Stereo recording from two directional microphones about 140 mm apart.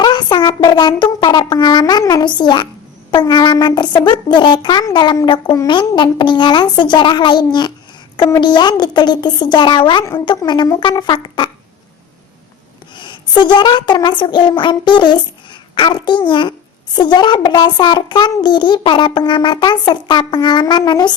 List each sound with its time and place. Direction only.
0.0 s a child's voice: 30° left (ahead or behind)
13.0 s a child's voice: 35° left (ahead or behind)